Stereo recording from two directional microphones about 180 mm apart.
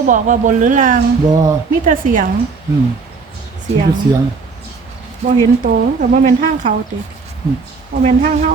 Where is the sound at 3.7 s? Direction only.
35° right (ahead or behind).